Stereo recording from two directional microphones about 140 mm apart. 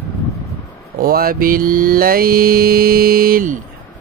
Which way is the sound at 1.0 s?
90° right.